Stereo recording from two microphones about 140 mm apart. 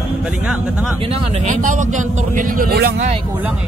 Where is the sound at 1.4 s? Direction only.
65° right (ahead or behind).